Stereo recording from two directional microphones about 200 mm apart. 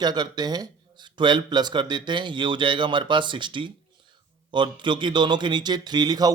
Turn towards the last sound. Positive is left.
turn(degrees=-20)  # may be behind; listen again after turning